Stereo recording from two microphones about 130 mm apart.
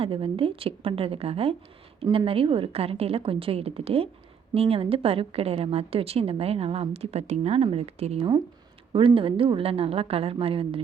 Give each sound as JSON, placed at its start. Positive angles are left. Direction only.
{"t": 0.0, "sound": "a woman's voice", "side_deg": -45}
{"t": 8.9, "sound": "a woman's voice", "side_deg": -40}